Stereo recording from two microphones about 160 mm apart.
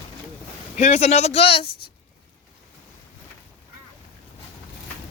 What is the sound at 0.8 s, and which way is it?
Speech, 45° left (ahead or behind).